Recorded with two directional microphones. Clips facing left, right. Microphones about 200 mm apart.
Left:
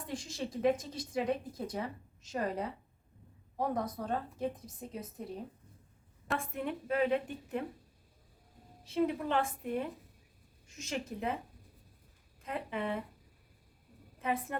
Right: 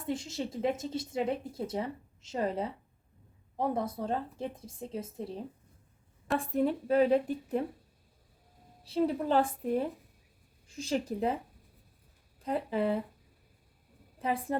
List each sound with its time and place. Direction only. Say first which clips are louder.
0.1 s speech: right 5 dB; 25° right (ahead or behind)
6.5 s a woman's voice: right 10 dB; 35° right (ahead or behind)
8.8 s a woman's voice: right 2 dB; 35° right (ahead or behind)
12.4 s speech: right 7 dB; 35° right (ahead or behind)
14.2 s a woman's voice: right 2 dB; 35° right (ahead or behind)